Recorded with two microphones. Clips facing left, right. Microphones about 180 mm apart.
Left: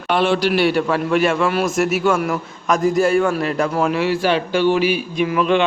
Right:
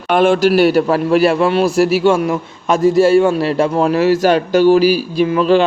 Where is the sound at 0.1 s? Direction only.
50° right (ahead or behind).